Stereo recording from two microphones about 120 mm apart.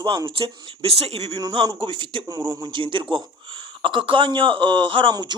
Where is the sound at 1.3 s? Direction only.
30° right (ahead or behind).